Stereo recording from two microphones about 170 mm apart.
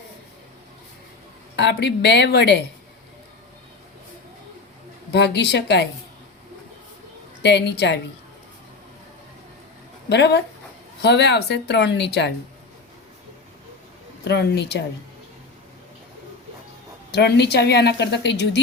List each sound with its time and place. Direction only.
1.5 s a woman's voice: 90° left
5.1 s a woman's voice: 80° left
7.4 s a woman's voice: 85° left
10.1 s speech: 75° left (ahead or behind)
11.0 s a woman's voice: 90° left
14.3 s a woman's voice: 80° left
17.1 s a woman's voice: 85° left